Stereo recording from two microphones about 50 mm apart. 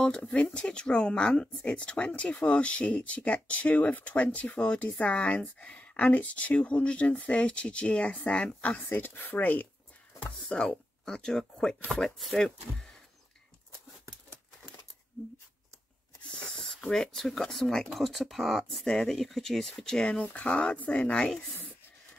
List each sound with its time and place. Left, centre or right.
0.6 s speech: centre
8.9 s speech: left
10.5 s speech: centre
16.3 s speech: centre
20.1 s speech: left
21.5 s writing: left